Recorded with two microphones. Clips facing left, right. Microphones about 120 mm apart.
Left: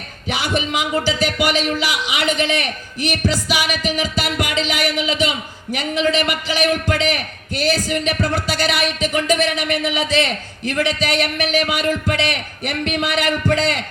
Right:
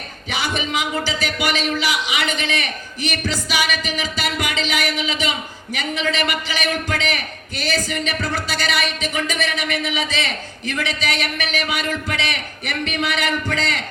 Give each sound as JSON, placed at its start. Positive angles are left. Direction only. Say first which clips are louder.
{"t": 0.3, "sound": "a man's voice", "louder": "left 3 dB", "side_deg": 10}